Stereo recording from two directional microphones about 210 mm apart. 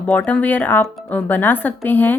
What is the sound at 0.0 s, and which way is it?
Speech, 5° left (ahead or behind).